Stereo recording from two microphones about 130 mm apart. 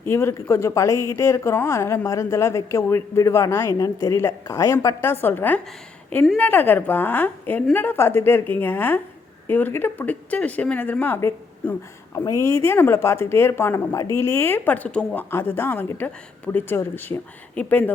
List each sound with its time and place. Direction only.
0.0 s a woman's voice: 20° left (ahead or behind)
12.1 s a woman's voice: 25° left (ahead or behind)